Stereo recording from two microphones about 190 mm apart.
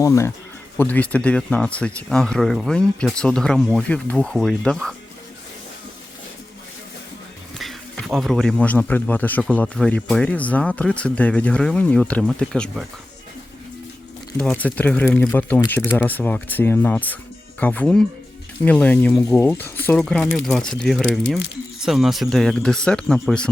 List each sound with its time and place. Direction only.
0.0 s speech: 15° left (ahead or behind)
7.6 s speech: centre (ahead or behind)
14.3 s speech: 5° left (ahead or behind)